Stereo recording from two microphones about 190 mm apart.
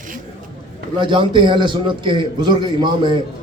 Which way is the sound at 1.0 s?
25° right (ahead or behind).